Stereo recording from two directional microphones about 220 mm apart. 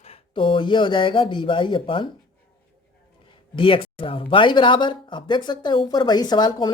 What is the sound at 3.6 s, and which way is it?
Speech, 25° left (ahead or behind).